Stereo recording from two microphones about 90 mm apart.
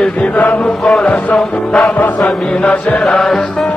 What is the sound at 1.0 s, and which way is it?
Chant, 15° left (ahead or behind).